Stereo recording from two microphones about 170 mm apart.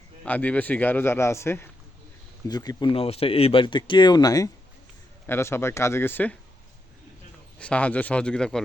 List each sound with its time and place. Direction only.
0.3 s speech: 10° left (ahead or behind)
7.6 s speech: 5° left (ahead or behind)